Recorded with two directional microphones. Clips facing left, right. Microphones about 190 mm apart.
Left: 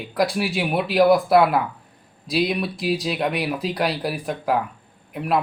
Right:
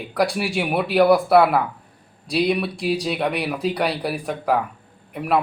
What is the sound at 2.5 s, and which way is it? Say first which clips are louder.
Speech: right 2 dB; centre (ahead or behind).